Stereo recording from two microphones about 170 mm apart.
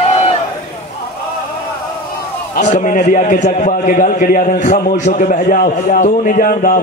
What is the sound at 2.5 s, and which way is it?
A man's voice, 45° left (ahead or behind).